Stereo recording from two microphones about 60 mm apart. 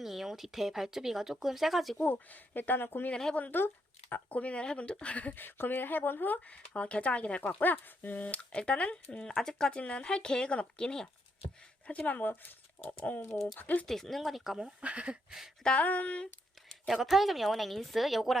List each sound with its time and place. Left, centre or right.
0.0 s speech: centre
2.0 s speech: left
3.1 s speech: centre
3.3 s speech: left
5.4 s speech: left
7.4 s speech: left; by 11.1 s centre
11.9 s speech: left
13.2 s speech: centre
13.6 s speech: left
13.8 s speech: centre
15.6 s speech: left
16.2 s a sound: centre
16.9 s speech: centre